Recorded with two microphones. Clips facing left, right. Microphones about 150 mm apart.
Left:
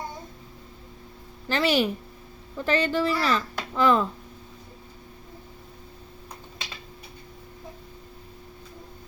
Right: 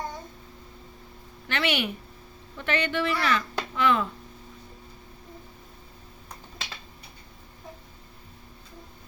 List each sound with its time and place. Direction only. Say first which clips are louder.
1.5 s speech: left 5 dB; 35° left (ahead or behind)